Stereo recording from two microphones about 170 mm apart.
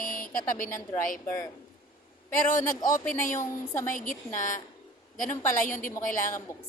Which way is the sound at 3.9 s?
50° left (ahead or behind).